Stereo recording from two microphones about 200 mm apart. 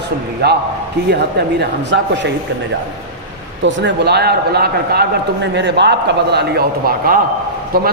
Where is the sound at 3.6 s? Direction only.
60° right (ahead or behind).